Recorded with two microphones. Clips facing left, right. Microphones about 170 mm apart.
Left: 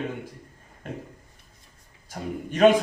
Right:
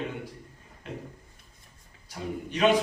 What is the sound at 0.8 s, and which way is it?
Speech, 45° left (ahead or behind).